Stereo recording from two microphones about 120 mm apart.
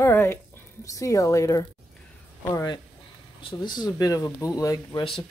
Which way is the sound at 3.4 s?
40° left (ahead or behind).